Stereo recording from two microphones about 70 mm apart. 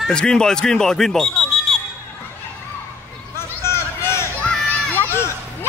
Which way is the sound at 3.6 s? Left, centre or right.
Left.